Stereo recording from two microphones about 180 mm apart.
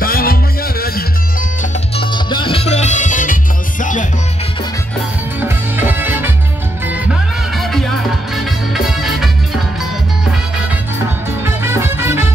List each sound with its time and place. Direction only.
0.0 s music: 55° left (ahead or behind)
2.0 s music: 25° left (ahead or behind); by 4.1 s 45° left (ahead or behind)
5.4 s music: 10° right (ahead or behind)
11.4 s music: 15° right (ahead or behind)